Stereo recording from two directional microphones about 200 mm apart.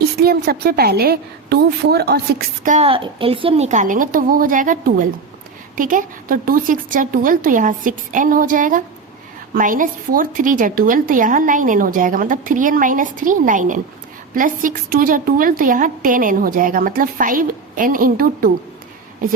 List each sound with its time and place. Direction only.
0.0 s a woman's voice: 50° right (ahead or behind)
2.6 s a woman's voice: 30° right (ahead or behind)